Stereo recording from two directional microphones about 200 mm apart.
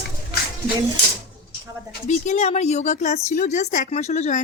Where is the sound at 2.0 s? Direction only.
35° left (ahead or behind).